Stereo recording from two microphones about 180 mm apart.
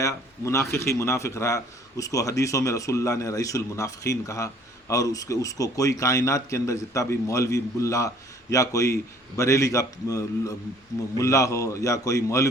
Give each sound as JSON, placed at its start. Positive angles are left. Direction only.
{"t": 0.0, "sound": "speech", "side_deg": 15}